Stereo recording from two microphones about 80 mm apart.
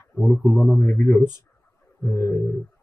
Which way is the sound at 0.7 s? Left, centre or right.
Left.